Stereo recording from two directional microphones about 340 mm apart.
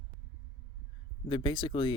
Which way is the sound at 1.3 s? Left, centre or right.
Centre.